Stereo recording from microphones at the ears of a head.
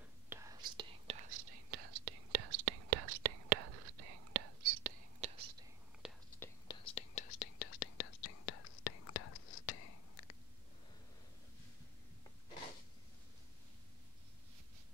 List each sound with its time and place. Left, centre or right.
0.5 s whispering: right
6.3 s whispering: left